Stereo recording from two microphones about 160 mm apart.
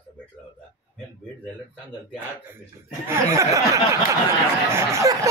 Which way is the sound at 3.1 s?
20° right (ahead or behind).